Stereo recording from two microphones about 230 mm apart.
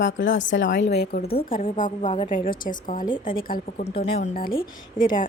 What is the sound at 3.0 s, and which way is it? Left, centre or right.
Speech, left.